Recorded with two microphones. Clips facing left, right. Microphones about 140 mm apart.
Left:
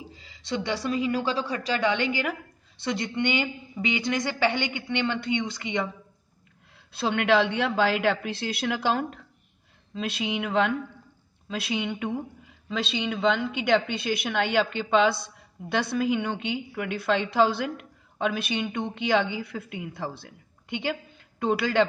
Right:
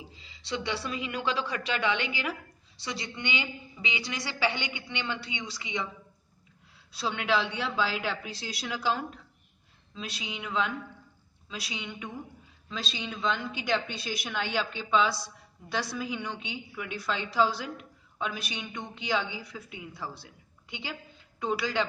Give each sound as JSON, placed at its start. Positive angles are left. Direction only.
{"t": 0.1, "sound": "a sound", "side_deg": 45}
{"t": 0.8, "sound": "a woman's voice", "side_deg": 40}
{"t": 6.9, "sound": "a woman's voice", "side_deg": 60}